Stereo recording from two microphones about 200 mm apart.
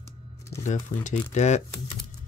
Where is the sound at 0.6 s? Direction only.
35° left (ahead or behind).